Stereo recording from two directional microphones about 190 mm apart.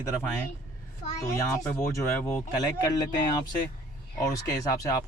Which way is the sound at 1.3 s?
15° left (ahead or behind).